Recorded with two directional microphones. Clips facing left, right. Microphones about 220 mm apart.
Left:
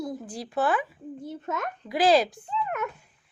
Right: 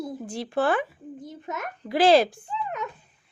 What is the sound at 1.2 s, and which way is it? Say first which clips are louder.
Speech: left 3 dB; 15° right (ahead or behind).